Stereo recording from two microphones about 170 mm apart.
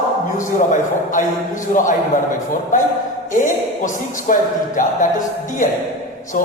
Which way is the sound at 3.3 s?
50° left (ahead or behind).